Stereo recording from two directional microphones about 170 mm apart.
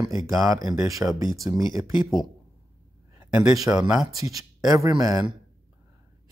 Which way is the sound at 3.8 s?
5° right (ahead or behind).